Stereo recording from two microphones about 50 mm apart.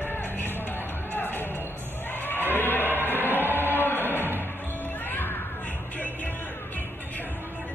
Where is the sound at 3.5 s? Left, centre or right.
Left.